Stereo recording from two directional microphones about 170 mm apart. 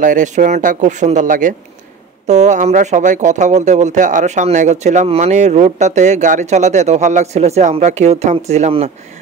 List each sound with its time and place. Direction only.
0.0 s speech: 50° right (ahead or behind)